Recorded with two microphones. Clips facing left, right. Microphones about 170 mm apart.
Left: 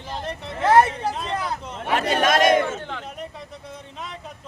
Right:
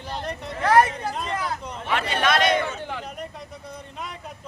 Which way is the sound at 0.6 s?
25° left (ahead or behind).